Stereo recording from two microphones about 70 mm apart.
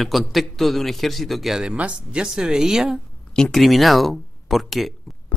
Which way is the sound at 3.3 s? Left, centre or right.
Centre.